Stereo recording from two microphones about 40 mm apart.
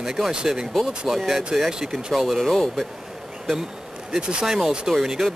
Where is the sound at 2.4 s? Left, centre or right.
Centre.